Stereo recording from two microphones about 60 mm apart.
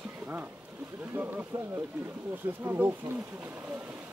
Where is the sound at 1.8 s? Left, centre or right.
Right.